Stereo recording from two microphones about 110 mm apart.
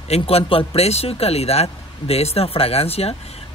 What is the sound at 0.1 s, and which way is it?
Speech, 65° left (ahead or behind).